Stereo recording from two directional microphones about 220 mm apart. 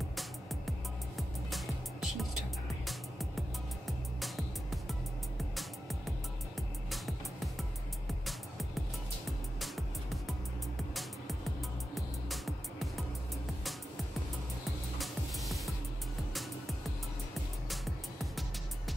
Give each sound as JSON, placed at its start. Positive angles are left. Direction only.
{"t": 0.1, "sound": "music", "side_deg": 0}
{"t": 11.9, "sound": "music", "side_deg": 0}
{"t": 15.0, "sound": "music", "side_deg": 0}
{"t": 17.6, "sound": "music", "side_deg": 0}